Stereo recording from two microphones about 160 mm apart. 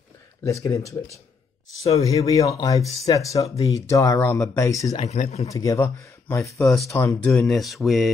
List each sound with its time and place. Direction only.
0.4 s speech: 20° left (ahead or behind)
2.0 s speech: 20° left (ahead or behind)
5.0 s speech: 45° left (ahead or behind)
5.5 s speech: 20° left (ahead or behind)
7.2 s speech: 10° left (ahead or behind)